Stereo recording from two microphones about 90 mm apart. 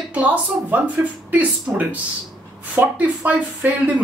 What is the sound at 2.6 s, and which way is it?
Speech, 20° right (ahead or behind).